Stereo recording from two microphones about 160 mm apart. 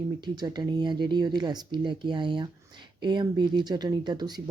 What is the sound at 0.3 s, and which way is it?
Speech, 25° right (ahead or behind).